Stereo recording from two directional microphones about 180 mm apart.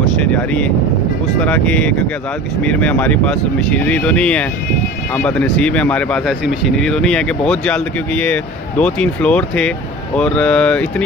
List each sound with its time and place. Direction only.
1.4 s speech: 10° left (ahead or behind)